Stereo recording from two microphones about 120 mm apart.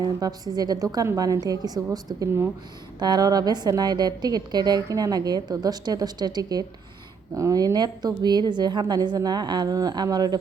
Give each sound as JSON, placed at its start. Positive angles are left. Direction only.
{"t": 0.0, "sound": "a woman's voice", "side_deg": -35}